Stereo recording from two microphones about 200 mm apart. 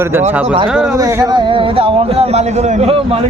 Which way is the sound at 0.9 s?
15° right (ahead or behind).